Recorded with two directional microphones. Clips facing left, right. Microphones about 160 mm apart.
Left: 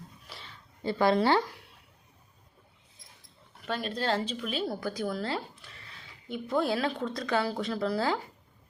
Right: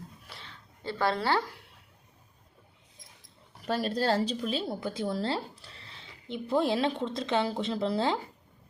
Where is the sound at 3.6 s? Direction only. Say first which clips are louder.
Right 3 dB; 40° right (ahead or behind).